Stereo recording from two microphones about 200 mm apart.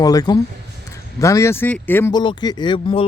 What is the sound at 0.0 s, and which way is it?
Speech, 20° left (ahead or behind).